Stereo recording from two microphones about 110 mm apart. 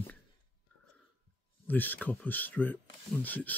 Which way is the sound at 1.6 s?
15° left (ahead or behind).